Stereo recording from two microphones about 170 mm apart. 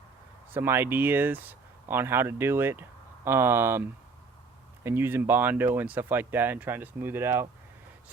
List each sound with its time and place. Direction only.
0.5 s speech: 15° right (ahead or behind)